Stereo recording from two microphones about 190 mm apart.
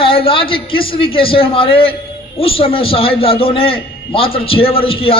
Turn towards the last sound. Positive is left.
turn(degrees=30)  # may be behind; listen again after turning